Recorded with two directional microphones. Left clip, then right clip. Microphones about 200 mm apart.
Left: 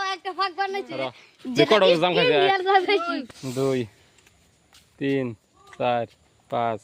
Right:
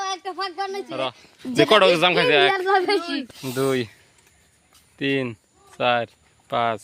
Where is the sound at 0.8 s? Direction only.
5° right (ahead or behind).